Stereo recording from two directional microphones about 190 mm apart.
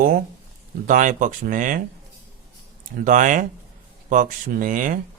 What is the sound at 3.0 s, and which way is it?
Speech, 45° right (ahead or behind).